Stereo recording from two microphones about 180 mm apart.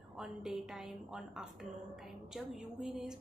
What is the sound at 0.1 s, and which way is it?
A woman's voice, 5° right (ahead or behind).